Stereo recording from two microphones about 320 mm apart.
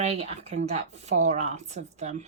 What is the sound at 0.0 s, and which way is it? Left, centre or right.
Speech, centre.